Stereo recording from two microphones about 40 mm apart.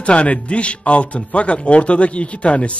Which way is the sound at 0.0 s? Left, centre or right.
Left.